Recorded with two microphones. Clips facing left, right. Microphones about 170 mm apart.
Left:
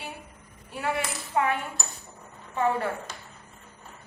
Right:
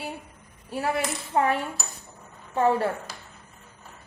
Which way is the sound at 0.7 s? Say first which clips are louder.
Right 3 dB; 40° right (ahead or behind).